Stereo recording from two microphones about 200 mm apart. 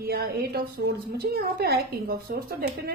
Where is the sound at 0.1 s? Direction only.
50° right (ahead or behind).